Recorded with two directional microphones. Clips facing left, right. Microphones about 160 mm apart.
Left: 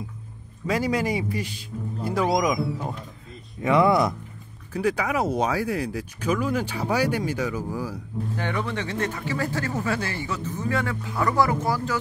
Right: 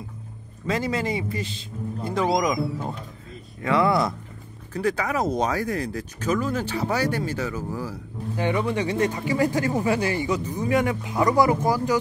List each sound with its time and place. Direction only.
0.7 s speech: 10° left (ahead or behind)
3.6 s speech: 20° left (ahead or behind)
8.4 s speech: 10° right (ahead or behind)